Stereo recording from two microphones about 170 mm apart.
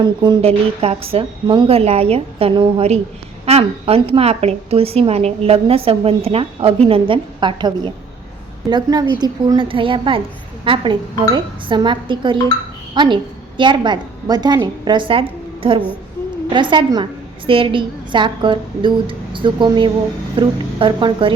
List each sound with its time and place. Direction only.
0.0 s a woman's voice: 25° right (ahead or behind)